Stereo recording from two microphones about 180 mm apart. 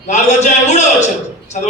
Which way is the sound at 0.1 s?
40° left (ahead or behind).